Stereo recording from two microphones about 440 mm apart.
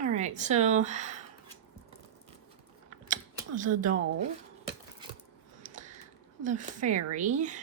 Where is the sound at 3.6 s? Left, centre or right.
Centre.